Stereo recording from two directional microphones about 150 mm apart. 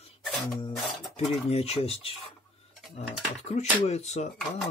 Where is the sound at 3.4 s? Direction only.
45° left (ahead or behind).